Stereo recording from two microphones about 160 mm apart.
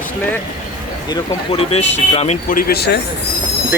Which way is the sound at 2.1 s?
40° left (ahead or behind).